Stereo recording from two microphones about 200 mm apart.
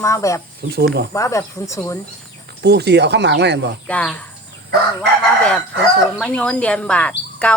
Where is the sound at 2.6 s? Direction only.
55° right (ahead or behind).